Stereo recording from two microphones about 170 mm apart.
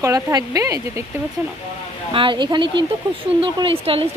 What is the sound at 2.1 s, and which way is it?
A woman's voice, 30° right (ahead or behind).